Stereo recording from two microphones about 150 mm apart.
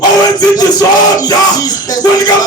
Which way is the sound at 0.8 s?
25° left (ahead or behind).